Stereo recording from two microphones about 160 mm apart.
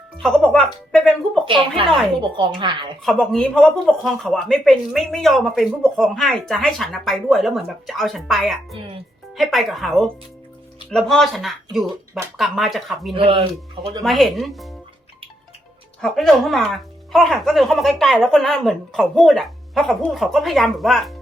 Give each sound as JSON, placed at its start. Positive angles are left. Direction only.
{"t": 0.2, "sound": "speech", "side_deg": 5}
{"t": 1.5, "sound": "speech", "side_deg": -35}
{"t": 3.0, "sound": "speech", "side_deg": 5}
{"t": 13.1, "sound": "speech", "side_deg": -35}
{"t": 14.0, "sound": "speech", "side_deg": 0}
{"t": 16.0, "sound": "speech", "side_deg": 5}